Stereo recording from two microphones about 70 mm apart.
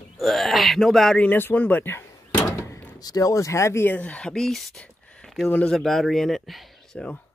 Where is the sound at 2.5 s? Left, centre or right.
Left.